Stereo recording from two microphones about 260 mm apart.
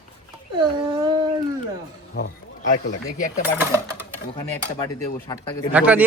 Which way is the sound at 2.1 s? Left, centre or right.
Left.